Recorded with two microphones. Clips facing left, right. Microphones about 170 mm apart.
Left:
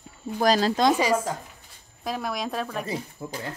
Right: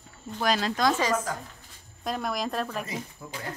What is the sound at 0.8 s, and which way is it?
A woman's voice, 15° left (ahead or behind).